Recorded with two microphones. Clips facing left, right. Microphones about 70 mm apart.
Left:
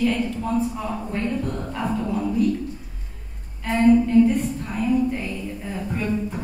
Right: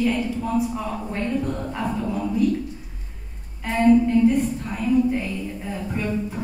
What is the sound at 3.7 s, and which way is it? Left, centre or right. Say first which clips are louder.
A woman's voice: left 1 dB; centre.